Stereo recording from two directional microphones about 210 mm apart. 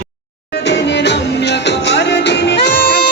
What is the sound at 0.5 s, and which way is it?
Music, 55° left (ahead or behind).